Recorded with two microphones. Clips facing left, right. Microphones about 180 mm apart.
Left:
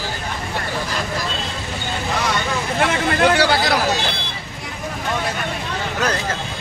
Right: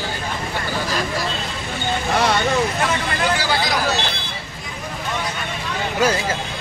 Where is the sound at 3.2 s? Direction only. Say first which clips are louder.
Left 7 dB; 65° left (ahead or behind).